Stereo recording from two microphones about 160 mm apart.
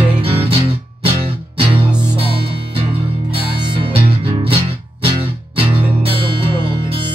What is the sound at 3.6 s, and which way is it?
Music, 35° right (ahead or behind).